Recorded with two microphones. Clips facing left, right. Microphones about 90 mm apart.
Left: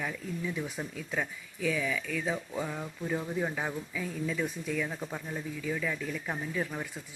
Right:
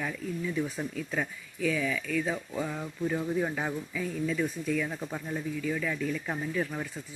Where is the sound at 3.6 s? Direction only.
10° left (ahead or behind).